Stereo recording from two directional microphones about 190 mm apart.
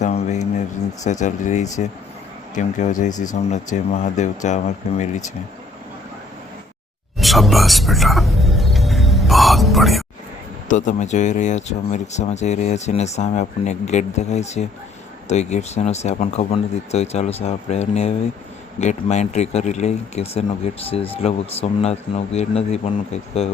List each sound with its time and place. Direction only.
0.0 s a sound: 40° left (ahead or behind)
1.2 s speech: 40° left (ahead or behind)
7.2 s music: centre (ahead or behind)
10.7 s speech: 40° left (ahead or behind)